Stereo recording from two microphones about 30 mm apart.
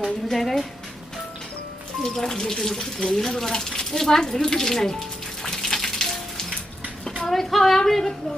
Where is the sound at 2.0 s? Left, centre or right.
Centre.